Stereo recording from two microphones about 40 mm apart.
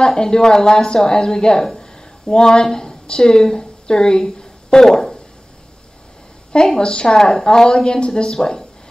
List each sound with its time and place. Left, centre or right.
0.0 s a woman's voice: centre
6.8 s a woman's voice: left